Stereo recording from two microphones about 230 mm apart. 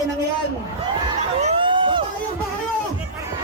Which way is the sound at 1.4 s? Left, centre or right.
Right.